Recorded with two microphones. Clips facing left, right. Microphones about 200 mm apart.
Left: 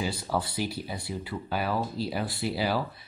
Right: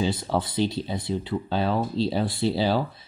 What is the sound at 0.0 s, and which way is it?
Speech, 20° right (ahead or behind).